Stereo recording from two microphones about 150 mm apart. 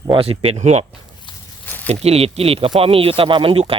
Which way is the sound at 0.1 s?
40° right (ahead or behind).